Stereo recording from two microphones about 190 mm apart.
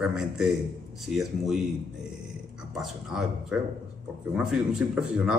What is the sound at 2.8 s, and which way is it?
Speech, centre (ahead or behind).